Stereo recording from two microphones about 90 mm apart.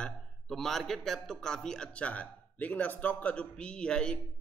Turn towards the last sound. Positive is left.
turn(degrees=10)  # may be behind; listen again after turning